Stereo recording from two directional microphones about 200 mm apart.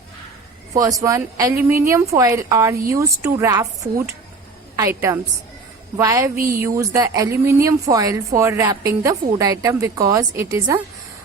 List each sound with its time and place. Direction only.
0.7 s a woman's voice: 15° right (ahead or behind)